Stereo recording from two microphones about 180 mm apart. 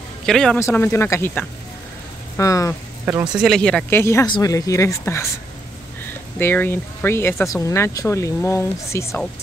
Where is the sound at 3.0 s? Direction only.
10° right (ahead or behind).